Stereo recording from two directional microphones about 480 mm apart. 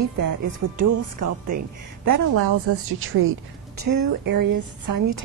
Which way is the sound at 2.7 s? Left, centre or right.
Right.